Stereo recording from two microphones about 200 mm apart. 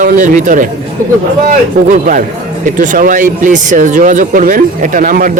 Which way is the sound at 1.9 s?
40° right (ahead or behind).